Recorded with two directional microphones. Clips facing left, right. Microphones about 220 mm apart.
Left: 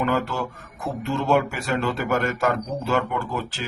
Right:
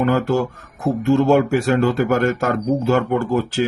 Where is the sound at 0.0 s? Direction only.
45° right (ahead or behind).